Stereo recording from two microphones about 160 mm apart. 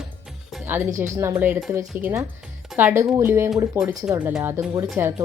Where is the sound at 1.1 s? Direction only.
15° right (ahead or behind).